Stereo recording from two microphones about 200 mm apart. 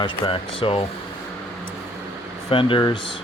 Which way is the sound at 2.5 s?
25° left (ahead or behind).